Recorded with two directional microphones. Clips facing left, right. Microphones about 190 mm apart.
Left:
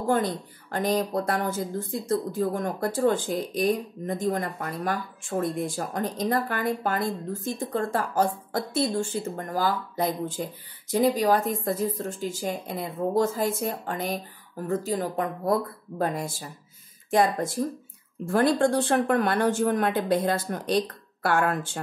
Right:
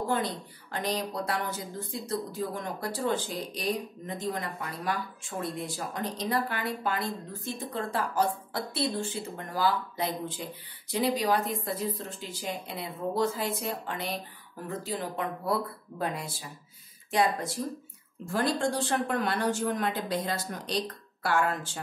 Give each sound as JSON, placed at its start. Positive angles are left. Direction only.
{"t": 0.1, "sound": "speech", "side_deg": 50}